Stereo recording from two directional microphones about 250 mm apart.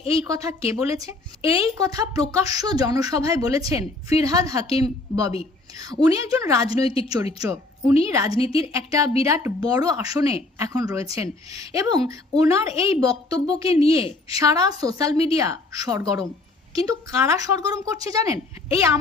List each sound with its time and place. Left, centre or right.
0.3 s a woman's voice: centre
6.8 s a woman's voice: left
7.3 s a woman's voice: centre
8.3 s a woman's voice: left
8.7 s a woman's voice: centre
13.7 s a woman's voice: left
14.3 s a woman's voice: centre
15.1 s a woman's voice: left
15.4 s a woman's voice: centre